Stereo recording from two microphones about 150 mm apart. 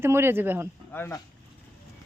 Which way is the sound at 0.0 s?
15° right (ahead or behind).